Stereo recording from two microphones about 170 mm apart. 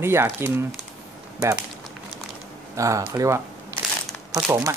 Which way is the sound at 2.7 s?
20° right (ahead or behind).